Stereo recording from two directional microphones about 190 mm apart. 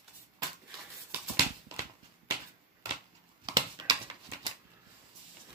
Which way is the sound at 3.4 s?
20° right (ahead or behind).